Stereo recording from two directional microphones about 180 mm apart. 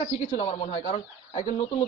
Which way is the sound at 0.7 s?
40° left (ahead or behind).